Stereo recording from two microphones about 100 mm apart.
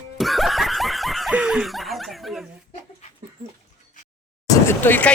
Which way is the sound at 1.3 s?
5° right (ahead or behind).